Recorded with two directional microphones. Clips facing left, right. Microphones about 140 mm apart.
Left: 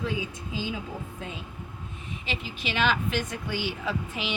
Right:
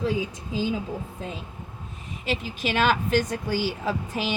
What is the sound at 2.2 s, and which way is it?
Speech, 45° right (ahead or behind).